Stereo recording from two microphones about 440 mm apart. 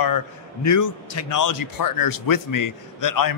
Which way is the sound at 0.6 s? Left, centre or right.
Left.